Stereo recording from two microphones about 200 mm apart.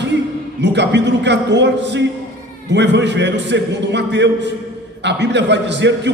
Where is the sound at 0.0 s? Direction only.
60° right (ahead or behind).